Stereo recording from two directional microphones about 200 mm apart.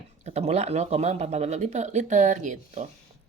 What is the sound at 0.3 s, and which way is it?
Speech, 35° right (ahead or behind).